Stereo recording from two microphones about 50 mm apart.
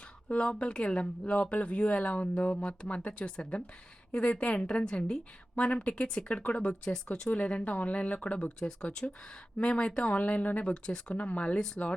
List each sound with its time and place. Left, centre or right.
0.3 s speech: left